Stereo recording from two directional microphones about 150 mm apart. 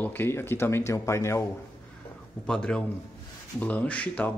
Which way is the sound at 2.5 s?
5° left (ahead or behind).